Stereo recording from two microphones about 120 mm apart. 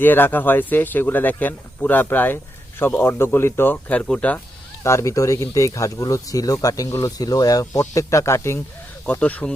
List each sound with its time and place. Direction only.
0.0 s speech: 15° left (ahead or behind)
4.8 s speech: 25° left (ahead or behind)